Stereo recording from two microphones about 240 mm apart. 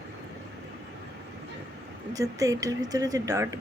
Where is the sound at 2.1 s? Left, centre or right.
Centre.